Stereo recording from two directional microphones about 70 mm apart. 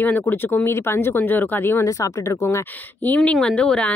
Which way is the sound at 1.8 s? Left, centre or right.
Left.